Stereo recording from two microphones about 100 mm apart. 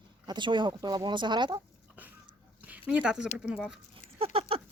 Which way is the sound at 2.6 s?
15° right (ahead or behind).